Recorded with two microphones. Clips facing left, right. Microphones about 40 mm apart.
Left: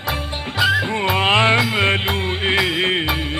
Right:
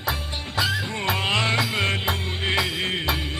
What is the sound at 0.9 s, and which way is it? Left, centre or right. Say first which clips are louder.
Music: left 7 dB; left.